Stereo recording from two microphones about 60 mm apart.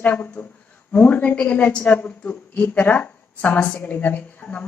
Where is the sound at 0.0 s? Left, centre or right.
Left.